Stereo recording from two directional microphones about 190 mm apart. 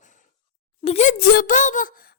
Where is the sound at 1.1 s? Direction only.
50° left (ahead or behind).